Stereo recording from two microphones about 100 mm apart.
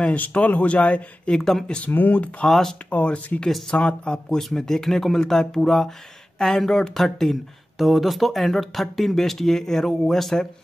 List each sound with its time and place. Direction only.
0.0 s speech: 15° left (ahead or behind)
1.9 s speech: 15° left (ahead or behind)
2.4 s speech: 5° left (ahead or behind)
2.9 s speech: 15° left (ahead or behind)